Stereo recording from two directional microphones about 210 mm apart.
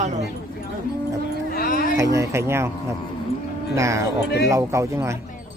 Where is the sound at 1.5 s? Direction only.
45° left (ahead or behind).